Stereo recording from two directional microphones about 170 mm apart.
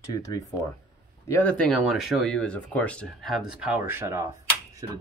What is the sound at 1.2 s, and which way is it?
Speech, 10° left (ahead or behind).